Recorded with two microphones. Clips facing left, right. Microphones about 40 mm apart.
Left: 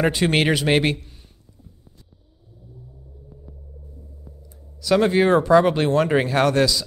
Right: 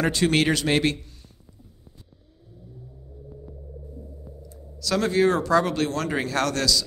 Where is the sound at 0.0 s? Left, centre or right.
Centre.